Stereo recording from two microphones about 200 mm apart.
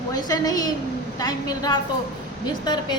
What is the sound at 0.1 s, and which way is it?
A woman's voice, 20° left (ahead or behind).